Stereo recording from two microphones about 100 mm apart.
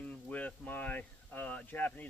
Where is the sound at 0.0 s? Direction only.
15° left (ahead or behind).